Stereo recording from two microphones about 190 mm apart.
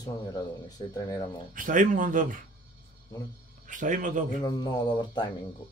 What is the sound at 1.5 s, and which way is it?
Speech, 45° right (ahead or behind).